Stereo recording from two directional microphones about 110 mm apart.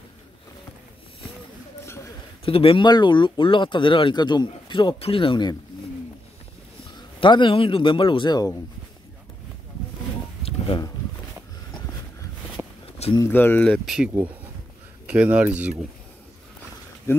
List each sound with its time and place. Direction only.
2.4 s speech: 55° left (ahead or behind)
2.9 s speech: 45° left (ahead or behind)
7.0 s speech: 45° left (ahead or behind)
10.7 s a sound: 50° left (ahead or behind)
12.6 s a sound: 20° right (ahead or behind)
13.2 s speech: 20° left (ahead or behind)
13.8 s speech: 5° right (ahead or behind)